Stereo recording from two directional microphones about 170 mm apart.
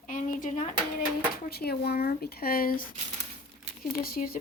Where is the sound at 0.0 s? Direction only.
50° left (ahead or behind).